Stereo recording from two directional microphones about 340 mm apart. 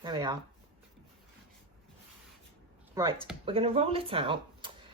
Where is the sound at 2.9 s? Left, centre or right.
Centre.